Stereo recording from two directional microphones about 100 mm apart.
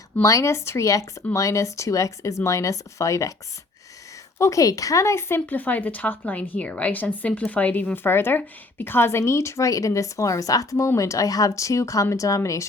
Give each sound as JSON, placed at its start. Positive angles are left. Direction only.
{"t": 0.2, "sound": "speech", "side_deg": 30}
{"t": 4.4, "sound": "speech", "side_deg": 30}